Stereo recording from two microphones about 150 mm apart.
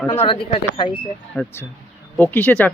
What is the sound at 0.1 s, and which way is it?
Speech, 35° left (ahead or behind).